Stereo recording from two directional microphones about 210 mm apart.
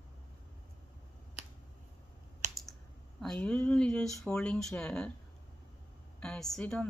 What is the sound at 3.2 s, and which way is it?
Speech, 5° left (ahead or behind).